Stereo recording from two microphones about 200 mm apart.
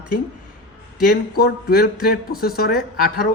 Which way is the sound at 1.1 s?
50° left (ahead or behind).